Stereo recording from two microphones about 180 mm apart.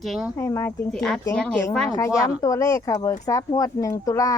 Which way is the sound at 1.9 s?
20° left (ahead or behind).